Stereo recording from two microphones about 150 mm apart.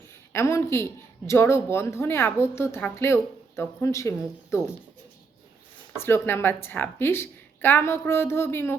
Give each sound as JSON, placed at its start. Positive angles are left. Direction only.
{"t": 0.3, "sound": "a woman's voice", "side_deg": 20}
{"t": 6.0, "sound": "a woman's voice", "side_deg": 15}